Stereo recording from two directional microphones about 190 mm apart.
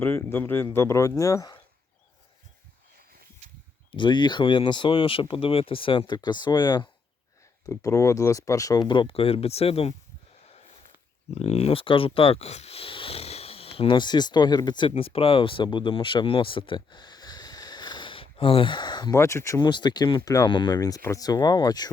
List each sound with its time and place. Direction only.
0.0 s speech: 10° left (ahead or behind)
3.4 s a sound: 35° right (ahead or behind)
3.9 s speech: 25° left (ahead or behind)
11.3 s speech: 35° left (ahead or behind)